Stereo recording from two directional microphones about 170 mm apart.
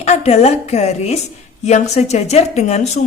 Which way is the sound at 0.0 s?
40° left (ahead or behind).